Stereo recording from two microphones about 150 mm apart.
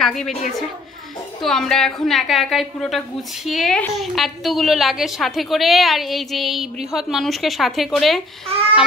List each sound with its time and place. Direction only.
0.0 s a woman's voice: 5° left (ahead or behind)
1.4 s a woman's voice: 5° left (ahead or behind)